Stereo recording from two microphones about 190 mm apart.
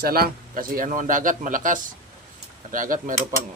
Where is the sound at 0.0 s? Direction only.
50° right (ahead or behind).